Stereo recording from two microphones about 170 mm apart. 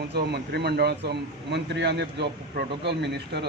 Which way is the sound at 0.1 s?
80° right.